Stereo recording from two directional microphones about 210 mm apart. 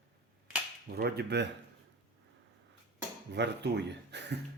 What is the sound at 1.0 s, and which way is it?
Speech, 50° right (ahead or behind).